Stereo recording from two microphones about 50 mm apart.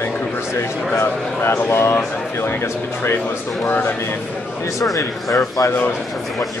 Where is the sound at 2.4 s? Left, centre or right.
Left.